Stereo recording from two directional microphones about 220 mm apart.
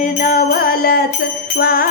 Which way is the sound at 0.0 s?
40° left (ahead or behind).